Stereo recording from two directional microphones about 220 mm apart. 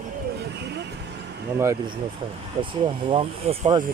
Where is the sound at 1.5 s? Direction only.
15° right (ahead or behind).